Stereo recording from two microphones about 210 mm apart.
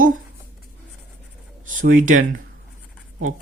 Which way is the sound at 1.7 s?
40° right (ahead or behind).